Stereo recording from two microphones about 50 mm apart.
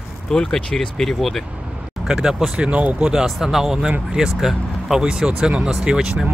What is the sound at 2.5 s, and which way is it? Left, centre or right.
Speech, right.